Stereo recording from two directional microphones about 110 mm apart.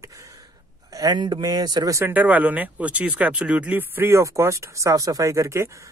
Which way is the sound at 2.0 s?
15° right (ahead or behind).